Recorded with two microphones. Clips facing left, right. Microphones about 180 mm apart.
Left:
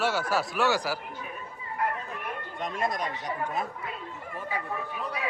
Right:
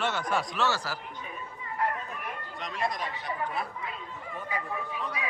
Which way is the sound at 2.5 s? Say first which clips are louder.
Left 2 dB; 50° left (ahead or behind).